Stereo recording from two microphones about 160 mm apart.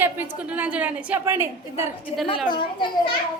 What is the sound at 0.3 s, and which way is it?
A woman's voice, 10° right (ahead or behind).